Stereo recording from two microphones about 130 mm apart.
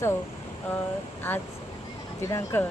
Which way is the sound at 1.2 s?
15° left (ahead or behind).